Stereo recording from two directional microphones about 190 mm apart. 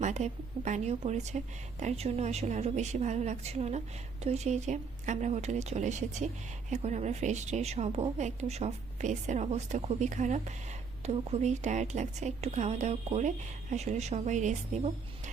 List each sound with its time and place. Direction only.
0.0 s a woman's voice: 40° right (ahead or behind)